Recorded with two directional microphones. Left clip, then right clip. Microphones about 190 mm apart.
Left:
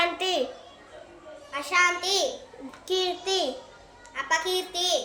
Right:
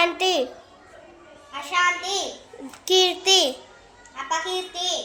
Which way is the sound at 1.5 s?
20° left (ahead or behind).